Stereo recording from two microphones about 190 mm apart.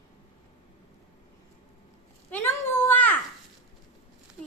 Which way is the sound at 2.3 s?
15° left (ahead or behind).